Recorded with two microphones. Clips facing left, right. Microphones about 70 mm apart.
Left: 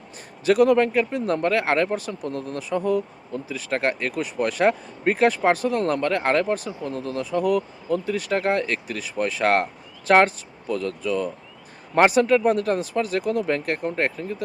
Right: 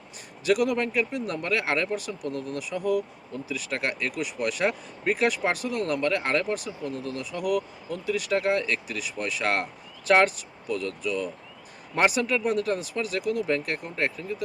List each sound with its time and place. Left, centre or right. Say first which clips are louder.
0.4 s speech: left 7 dB; left